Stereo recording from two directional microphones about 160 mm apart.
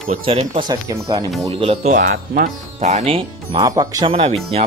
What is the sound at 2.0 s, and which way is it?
Speech, 90° right.